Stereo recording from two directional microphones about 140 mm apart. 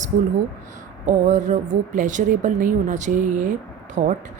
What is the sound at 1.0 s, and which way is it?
Speech, 60° right (ahead or behind).